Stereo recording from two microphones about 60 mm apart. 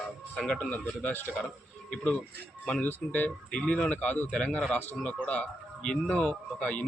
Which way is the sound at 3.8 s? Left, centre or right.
Centre.